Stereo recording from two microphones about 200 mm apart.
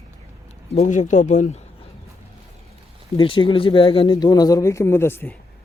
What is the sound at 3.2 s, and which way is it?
Speech, 25° left (ahead or behind).